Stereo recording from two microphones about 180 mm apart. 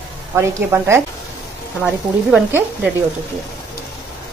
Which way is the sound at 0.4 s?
15° right (ahead or behind).